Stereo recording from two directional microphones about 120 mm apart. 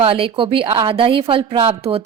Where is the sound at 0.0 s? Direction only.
50° right (ahead or behind).